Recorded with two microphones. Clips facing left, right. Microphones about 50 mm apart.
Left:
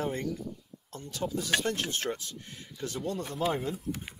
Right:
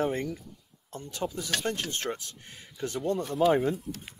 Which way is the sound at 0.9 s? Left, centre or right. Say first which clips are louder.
Even; right.